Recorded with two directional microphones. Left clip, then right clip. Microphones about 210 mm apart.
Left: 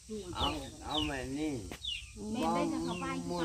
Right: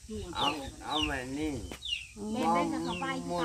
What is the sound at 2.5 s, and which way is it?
Speech, 25° right (ahead or behind).